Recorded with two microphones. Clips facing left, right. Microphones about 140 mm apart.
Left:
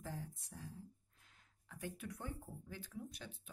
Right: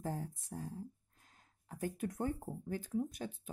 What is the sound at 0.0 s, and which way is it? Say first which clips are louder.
Speech: right 7 dB; 45° right (ahead or behind).